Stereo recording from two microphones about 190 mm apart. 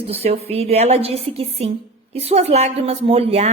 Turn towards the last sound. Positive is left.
turn(degrees=-35)  # may be behind; listen again after turning